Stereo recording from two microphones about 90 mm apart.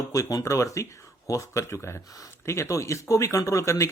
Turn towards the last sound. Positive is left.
turn(degrees=35)  # may be behind; listen again after turning